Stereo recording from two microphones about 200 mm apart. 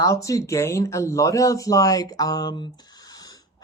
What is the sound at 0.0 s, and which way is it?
Speech, 15° left (ahead or behind).